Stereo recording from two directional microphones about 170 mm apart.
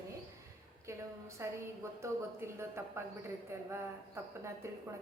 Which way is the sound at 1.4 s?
15° right (ahead or behind).